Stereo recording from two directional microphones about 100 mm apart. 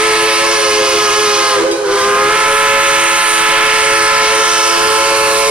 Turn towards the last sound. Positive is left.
turn(degrees=-10)  # may be behind; listen again after turning